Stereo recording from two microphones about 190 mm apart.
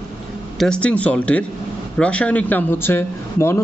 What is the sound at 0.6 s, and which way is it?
Speech, 5° left (ahead or behind).